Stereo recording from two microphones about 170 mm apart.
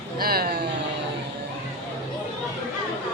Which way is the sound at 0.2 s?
60° right (ahead or behind).